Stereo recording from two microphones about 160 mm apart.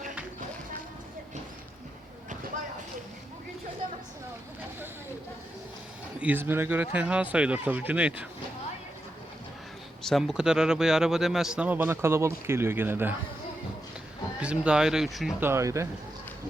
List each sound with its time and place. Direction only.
6.1 s speech: 10° right (ahead or behind)
10.0 s speech: centre (ahead or behind)
14.3 s speech: 5° right (ahead or behind)
15.4 s speech: 15° right (ahead or behind)